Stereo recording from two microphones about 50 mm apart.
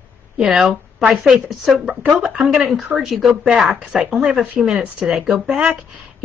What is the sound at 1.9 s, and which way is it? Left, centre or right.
Speech, right.